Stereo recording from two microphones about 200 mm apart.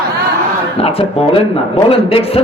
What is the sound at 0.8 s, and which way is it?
Speech, 30° left (ahead or behind).